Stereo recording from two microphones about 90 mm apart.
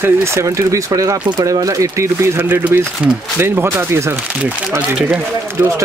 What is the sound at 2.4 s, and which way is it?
Speech, 20° right (ahead or behind).